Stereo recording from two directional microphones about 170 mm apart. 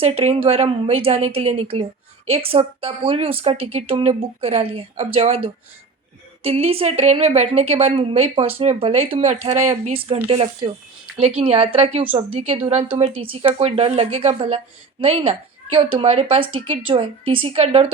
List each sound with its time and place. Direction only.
0.0 s a woman's voice: 35° right (ahead or behind)